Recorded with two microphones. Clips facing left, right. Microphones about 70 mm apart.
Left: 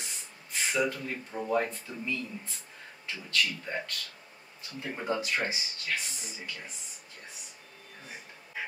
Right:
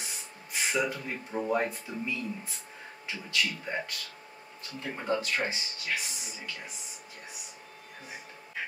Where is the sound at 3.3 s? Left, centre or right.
Centre.